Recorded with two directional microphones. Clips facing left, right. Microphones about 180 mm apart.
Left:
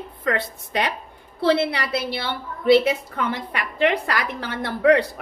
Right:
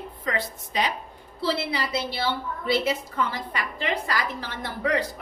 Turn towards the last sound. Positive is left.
turn(degrees=65)  # may be behind; listen again after turning